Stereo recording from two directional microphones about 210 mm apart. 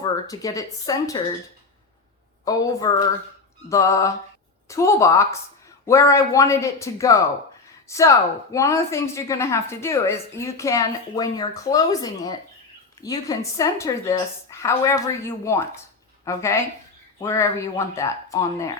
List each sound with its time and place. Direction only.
0.0 s speech: 15° left (ahead or behind)
2.4 s a woman's voice: 15° left (ahead or behind)